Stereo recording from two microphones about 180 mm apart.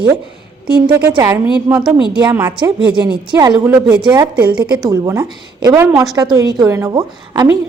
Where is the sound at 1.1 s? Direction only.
20° right (ahead or behind).